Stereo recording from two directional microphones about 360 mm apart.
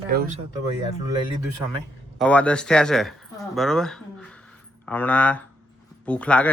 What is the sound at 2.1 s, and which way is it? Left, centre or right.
A man's voice, centre.